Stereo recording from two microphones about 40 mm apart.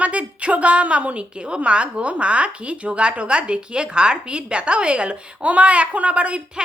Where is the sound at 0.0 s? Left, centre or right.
Right.